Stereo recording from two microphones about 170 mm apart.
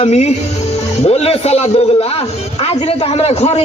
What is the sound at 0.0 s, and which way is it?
A man's voice, 40° left (ahead or behind).